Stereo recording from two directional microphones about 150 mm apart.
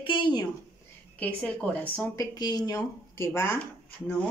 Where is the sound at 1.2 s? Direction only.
10° left (ahead or behind).